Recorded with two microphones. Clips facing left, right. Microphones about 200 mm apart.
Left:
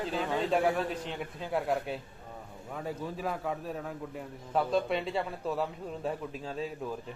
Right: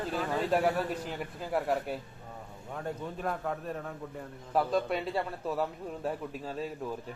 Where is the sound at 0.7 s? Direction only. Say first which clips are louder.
Even; 5° right (ahead or behind).